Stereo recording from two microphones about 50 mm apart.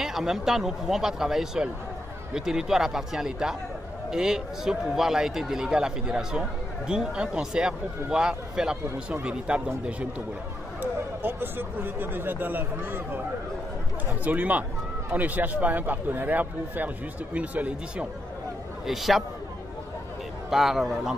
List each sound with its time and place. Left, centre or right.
0.0 s a man's voice: centre
10.8 s speech: right
14.2 s speech: right
18.9 s a man's voice: centre
20.4 s a man's voice: centre